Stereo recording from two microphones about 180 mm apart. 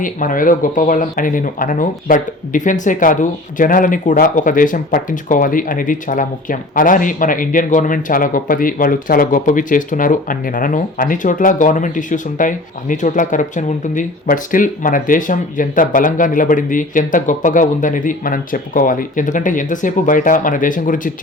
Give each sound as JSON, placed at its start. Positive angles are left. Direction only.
{"t": 0.0, "sound": "speech", "side_deg": 50}